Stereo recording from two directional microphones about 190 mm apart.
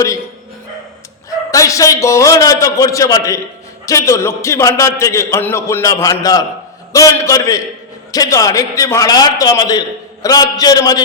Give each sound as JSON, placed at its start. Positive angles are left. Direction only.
{"t": 1.5, "sound": "a man's voice", "side_deg": 15}